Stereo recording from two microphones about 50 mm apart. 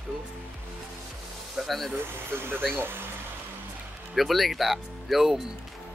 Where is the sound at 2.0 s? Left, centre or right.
Right.